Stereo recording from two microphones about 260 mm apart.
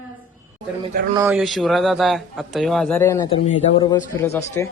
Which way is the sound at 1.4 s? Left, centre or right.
Centre.